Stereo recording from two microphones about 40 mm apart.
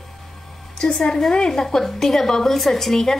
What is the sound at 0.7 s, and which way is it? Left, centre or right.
A woman's voice, centre.